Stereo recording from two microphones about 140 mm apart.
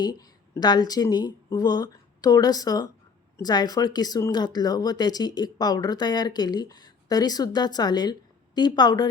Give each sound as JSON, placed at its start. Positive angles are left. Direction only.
{"t": 0.0, "sound": "a woman's voice", "side_deg": 30}